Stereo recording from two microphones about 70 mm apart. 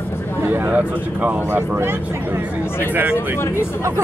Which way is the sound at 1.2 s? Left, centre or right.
Right.